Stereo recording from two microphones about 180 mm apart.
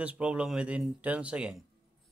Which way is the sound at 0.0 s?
5° right (ahead or behind).